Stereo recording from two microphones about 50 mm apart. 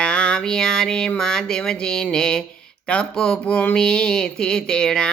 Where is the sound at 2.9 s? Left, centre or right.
Centre.